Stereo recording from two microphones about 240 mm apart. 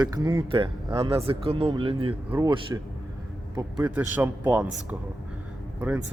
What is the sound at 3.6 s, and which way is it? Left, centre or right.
A man's voice, centre.